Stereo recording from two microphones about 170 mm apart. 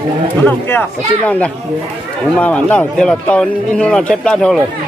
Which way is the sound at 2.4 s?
10° left (ahead or behind).